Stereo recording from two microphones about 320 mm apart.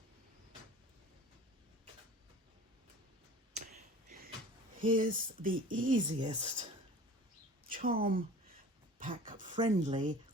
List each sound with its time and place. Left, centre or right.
4.8 s speech: right
6.0 s speech: centre
7.7 s a woman's voice: right
9.0 s a sound: right